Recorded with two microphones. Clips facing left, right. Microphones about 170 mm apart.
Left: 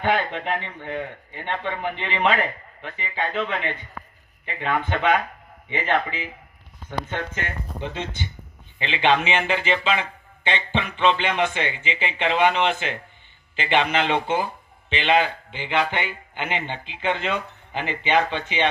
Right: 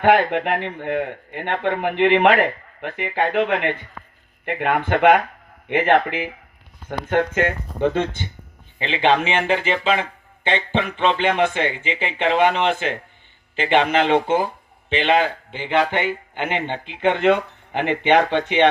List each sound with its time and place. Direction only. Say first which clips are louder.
0.0 s speech: right 7 dB; 60° right (ahead or behind)